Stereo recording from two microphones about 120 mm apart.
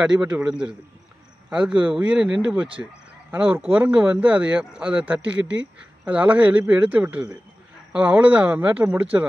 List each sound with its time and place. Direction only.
0.0 s speech: 10° right (ahead or behind)
2.8 s speech: 15° right (ahead or behind)